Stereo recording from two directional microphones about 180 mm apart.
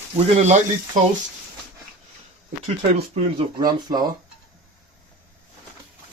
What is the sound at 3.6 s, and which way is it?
Speech, 20° right (ahead or behind).